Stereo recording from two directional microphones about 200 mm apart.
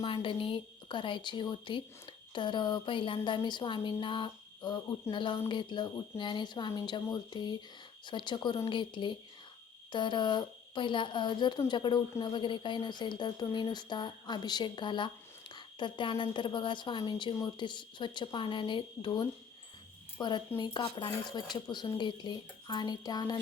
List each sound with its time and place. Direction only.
0.0 s speech: 25° left (ahead or behind)